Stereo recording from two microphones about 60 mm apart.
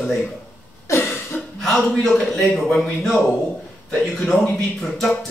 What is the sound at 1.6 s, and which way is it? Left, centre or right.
A man's voice, centre.